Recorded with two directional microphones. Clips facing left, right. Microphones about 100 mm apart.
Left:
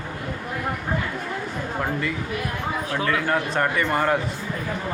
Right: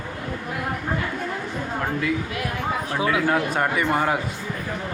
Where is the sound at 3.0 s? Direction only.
10° right (ahead or behind).